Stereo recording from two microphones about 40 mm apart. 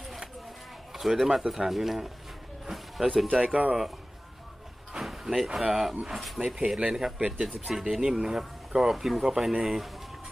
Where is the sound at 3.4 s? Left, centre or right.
Right.